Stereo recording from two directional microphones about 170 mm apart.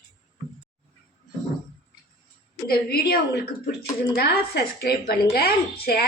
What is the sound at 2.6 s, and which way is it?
A woman's voice, 65° left (ahead or behind).